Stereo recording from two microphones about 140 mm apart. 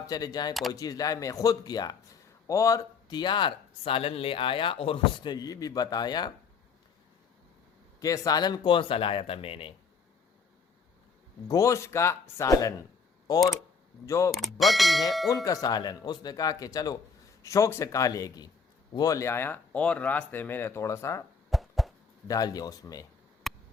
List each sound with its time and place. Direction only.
0.1 s speech: 25° left (ahead or behind)
7.9 s speech: 25° left (ahead or behind); by 9.7 s 40° left (ahead or behind)
11.4 s speech: 25° left (ahead or behind)
14.3 s speech: centre (ahead or behind)
15.4 s speech: 25° left (ahead or behind)
21.5 s a sound: centre (ahead or behind)
22.3 s speech: 25° left (ahead or behind)
23.5 s a sound: centre (ahead or behind)